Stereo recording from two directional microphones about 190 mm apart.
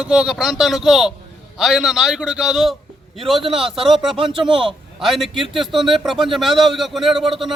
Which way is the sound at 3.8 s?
Centre (ahead or behind).